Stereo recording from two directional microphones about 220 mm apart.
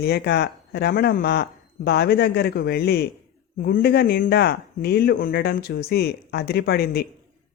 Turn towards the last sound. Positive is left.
turn(degrees=45)  # may be behind; listen again after turning